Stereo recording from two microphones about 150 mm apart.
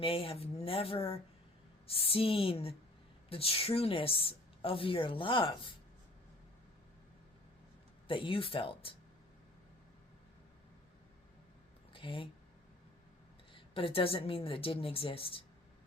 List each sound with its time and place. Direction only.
0.0 s a woman's voice: 35° left (ahead or behind)
8.0 s a woman's voice: 35° left (ahead or behind)
11.9 s speech: 35° left (ahead or behind)
13.5 s a woman's voice: 35° left (ahead or behind)